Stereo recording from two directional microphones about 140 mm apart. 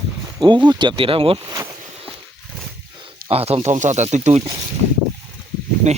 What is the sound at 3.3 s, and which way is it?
Speech, 45° right (ahead or behind).